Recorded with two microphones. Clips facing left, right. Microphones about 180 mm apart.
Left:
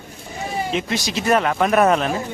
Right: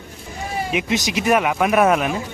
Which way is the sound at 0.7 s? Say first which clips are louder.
Right 5 dB; 15° right (ahead or behind).